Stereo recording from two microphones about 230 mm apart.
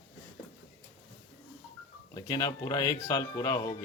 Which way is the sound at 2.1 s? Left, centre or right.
Centre.